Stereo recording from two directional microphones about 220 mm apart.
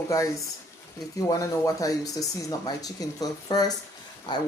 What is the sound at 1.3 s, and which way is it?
Speech, 15° left (ahead or behind).